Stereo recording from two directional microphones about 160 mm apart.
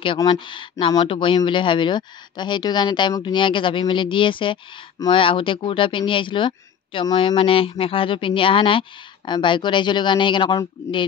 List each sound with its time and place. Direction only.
0.0 s speech: 30° left (ahead or behind)